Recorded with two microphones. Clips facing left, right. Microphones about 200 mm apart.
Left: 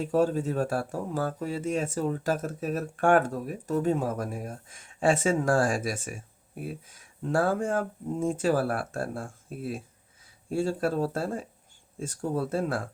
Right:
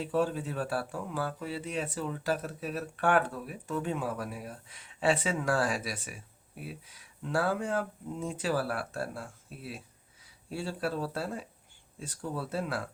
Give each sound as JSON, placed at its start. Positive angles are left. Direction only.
{"t": 0.0, "sound": "speech", "side_deg": 40}